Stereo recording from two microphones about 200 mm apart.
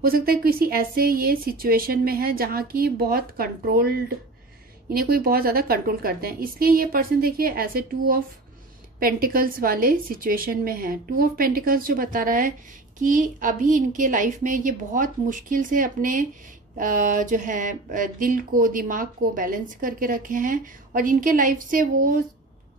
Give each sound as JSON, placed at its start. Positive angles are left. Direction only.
{"t": 0.0, "sound": "a woman's voice", "side_deg": -50}